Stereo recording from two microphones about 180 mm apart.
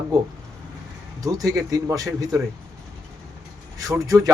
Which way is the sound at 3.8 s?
20° right (ahead or behind).